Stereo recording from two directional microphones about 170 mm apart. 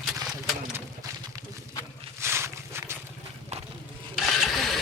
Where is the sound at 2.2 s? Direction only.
15° right (ahead or behind).